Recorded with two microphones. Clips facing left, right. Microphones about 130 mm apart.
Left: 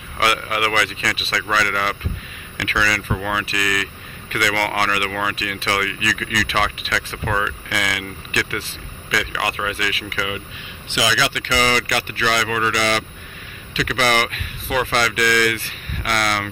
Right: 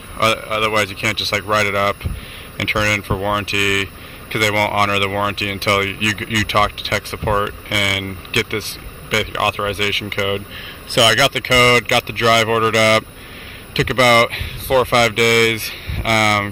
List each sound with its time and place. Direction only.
0.2 s speech: 45° right (ahead or behind)
0.8 s speech: 70° right (ahead or behind)
1.5 s speech: 50° right (ahead or behind)
4.3 s speech: 50° right (ahead or behind)
9.1 s speech: 55° right (ahead or behind)
11.0 s speech: 85° right; by 16.4 s 55° right (ahead or behind)